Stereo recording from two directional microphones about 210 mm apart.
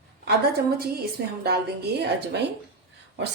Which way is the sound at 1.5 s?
50° right (ahead or behind).